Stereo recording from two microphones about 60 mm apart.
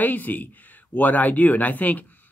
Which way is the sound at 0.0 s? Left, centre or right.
Left.